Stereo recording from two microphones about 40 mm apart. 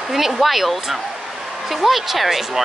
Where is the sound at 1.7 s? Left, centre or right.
Centre.